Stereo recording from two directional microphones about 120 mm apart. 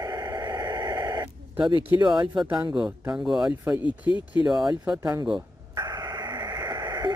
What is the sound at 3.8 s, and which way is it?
Speech, 40° left (ahead or behind).